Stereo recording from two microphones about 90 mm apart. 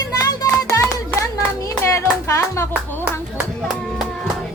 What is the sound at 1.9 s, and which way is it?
Music, 30° left (ahead or behind).